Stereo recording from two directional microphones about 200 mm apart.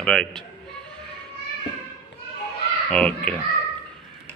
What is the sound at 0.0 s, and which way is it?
Speech, 5° left (ahead or behind).